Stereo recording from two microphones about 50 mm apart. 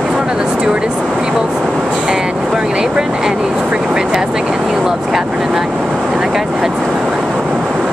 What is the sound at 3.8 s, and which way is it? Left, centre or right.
Speech, centre.